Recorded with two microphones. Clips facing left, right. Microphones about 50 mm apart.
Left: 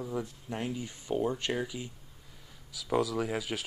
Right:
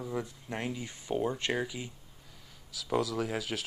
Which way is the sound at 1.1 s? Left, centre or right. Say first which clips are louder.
Left 1 dB; right.